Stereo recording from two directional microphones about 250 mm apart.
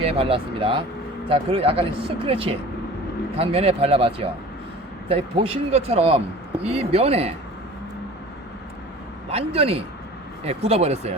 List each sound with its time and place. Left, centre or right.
0.0 s a man's voice: right
9.3 s a man's voice: right